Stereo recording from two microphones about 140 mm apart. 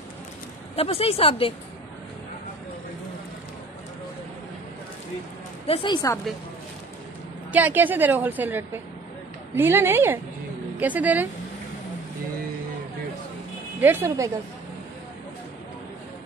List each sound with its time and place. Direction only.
0.7 s speech: 45° left (ahead or behind)
5.7 s a woman's voice: 35° left (ahead or behind)
7.5 s a woman's voice: 10° right (ahead or behind)
13.7 s speech: 15° right (ahead or behind)